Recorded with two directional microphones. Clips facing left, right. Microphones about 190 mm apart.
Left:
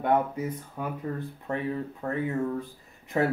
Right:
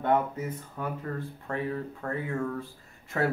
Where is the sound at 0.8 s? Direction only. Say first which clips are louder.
Left 1 dB; 15° left (ahead or behind).